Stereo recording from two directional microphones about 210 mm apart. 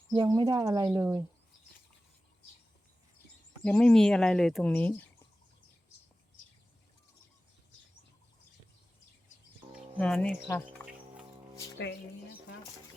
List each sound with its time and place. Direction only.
0.2 s speech: 20° right (ahead or behind)
3.6 s speech: 5° left (ahead or behind)
10.0 s speech: 5° left (ahead or behind)
10.8 s music: 10° left (ahead or behind)